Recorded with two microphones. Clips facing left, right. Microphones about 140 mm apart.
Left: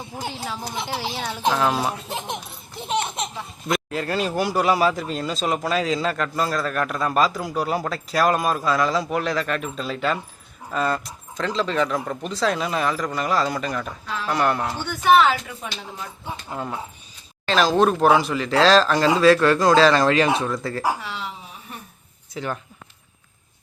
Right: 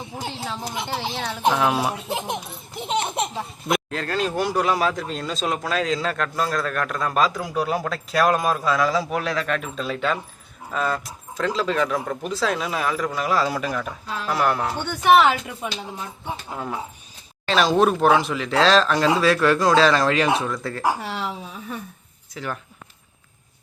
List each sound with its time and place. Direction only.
0.3 s speech: 5° left (ahead or behind)
1.4 s speech: 10° right (ahead or behind)
2.0 s baby laughter: 15° right (ahead or behind)
3.9 s speech: 5° left (ahead or behind)
14.8 s a woman's voice: 20° right (ahead or behind)
16.5 s speech: centre (ahead or behind)